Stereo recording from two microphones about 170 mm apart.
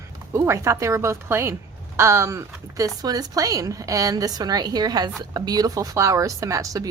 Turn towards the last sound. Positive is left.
turn(degrees=-20)  # may be behind; listen again after turning